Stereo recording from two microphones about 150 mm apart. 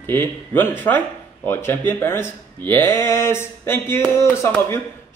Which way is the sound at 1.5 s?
15° left (ahead or behind).